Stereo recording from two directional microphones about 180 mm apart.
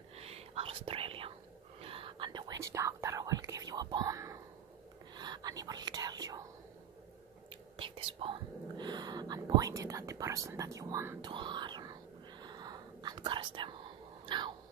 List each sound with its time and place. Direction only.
0.1 s whispering: 35° right (ahead or behind)
7.7 s whispering: 30° right (ahead or behind)
14.2 s a sound: 25° right (ahead or behind)